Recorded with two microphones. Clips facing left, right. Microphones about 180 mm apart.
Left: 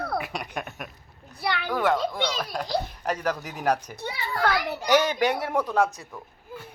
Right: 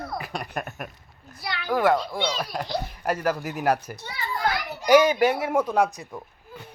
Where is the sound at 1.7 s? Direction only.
10° right (ahead or behind).